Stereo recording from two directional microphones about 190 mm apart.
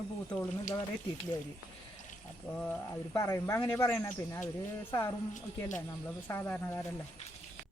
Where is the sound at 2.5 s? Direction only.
10° left (ahead or behind).